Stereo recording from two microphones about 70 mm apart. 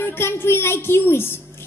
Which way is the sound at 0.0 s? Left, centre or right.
Left.